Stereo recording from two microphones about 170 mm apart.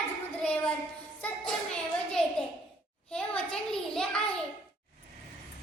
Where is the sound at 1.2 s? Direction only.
5° left (ahead or behind).